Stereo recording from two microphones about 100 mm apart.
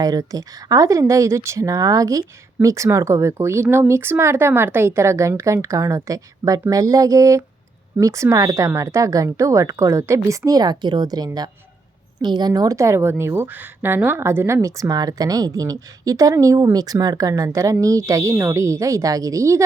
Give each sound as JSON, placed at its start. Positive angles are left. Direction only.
{"t": 0.0, "sound": "a woman's voice", "side_deg": -40}